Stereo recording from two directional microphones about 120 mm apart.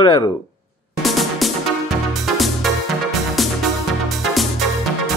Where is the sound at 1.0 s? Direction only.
Centre (ahead or behind).